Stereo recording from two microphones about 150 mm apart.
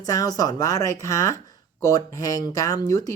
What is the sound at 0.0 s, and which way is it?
Speech, 25° left (ahead or behind).